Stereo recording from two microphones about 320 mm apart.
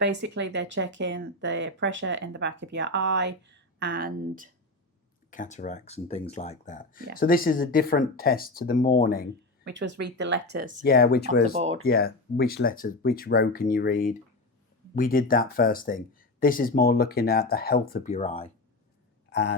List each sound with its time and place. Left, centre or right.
0.0 s speech: right
5.3 s speech: left
9.7 s speech: right
10.8 s speech: left
11.5 s speech: centre
11.8 s speech: left
19.3 s a sound: left